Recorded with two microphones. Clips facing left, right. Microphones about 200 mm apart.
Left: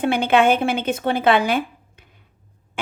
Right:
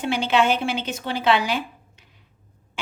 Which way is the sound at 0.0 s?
55° left (ahead or behind).